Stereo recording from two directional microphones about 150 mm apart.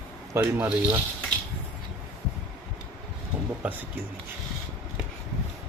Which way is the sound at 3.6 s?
10° right (ahead or behind).